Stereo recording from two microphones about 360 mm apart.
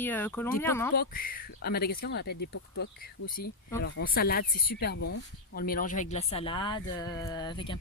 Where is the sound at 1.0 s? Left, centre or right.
Left.